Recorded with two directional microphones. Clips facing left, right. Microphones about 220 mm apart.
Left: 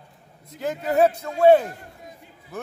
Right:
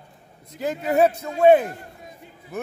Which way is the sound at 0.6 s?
15° right (ahead or behind).